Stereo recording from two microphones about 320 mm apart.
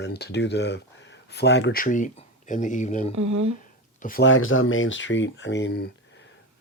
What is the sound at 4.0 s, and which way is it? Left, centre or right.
Speech, left.